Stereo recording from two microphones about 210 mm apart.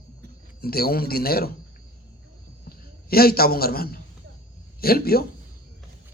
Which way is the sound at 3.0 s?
45° left (ahead or behind).